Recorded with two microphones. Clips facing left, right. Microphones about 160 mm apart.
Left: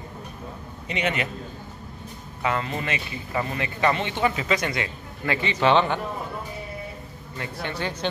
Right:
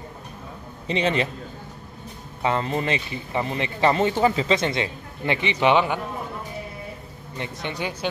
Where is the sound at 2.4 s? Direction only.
30° right (ahead or behind); by 6.0 s 10° right (ahead or behind).